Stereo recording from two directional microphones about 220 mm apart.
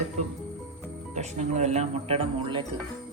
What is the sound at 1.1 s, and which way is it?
Speech, 30° right (ahead or behind).